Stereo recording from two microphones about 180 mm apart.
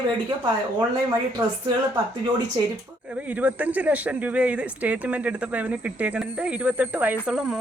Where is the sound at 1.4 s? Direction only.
15° right (ahead or behind).